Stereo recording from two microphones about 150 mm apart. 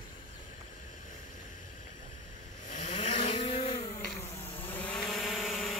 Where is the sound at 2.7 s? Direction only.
50° left (ahead or behind).